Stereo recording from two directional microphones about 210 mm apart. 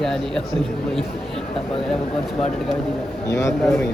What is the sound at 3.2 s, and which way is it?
Speech, 15° left (ahead or behind).